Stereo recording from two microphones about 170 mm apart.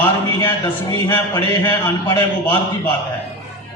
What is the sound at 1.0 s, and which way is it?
A man's voice, 15° left (ahead or behind).